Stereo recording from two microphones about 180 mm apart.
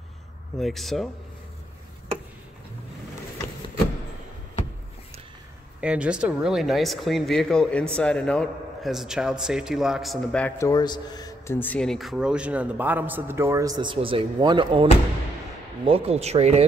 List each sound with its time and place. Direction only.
0.6 s speech: centre (ahead or behind)
5.8 s speech: 5° right (ahead or behind)
10.6 s speech: 20° left (ahead or behind); by 16.6 s 35° right (ahead or behind)